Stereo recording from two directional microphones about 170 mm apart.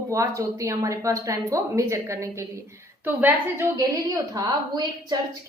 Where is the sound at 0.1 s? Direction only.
20° right (ahead or behind).